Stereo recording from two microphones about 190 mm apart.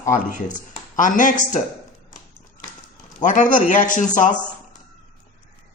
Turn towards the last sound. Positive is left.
turn(degrees=40)  # may be behind; listen again after turning